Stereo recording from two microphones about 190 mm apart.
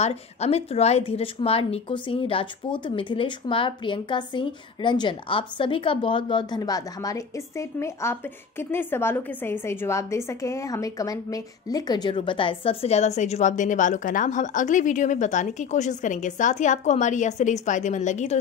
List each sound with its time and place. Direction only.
0.0 s a woman's voice: 35° left (ahead or behind)